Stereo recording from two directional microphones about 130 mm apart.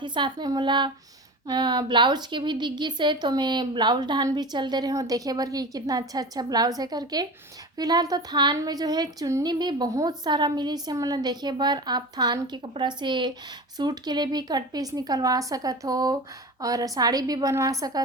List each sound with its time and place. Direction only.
0.0 s a woman's voice: 35° right (ahead or behind)